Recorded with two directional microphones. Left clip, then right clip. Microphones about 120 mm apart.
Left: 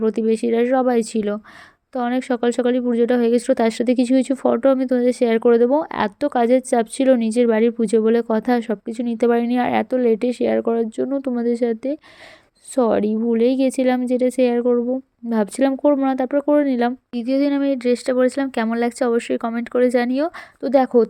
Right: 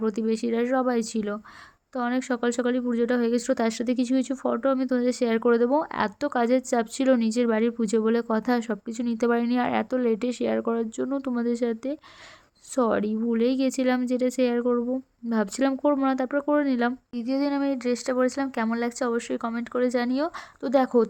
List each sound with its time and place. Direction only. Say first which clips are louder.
0.0 s speech: left 8 dB; 30° left (ahead or behind)
17.2 s speech: left 8 dB; 35° left (ahead or behind)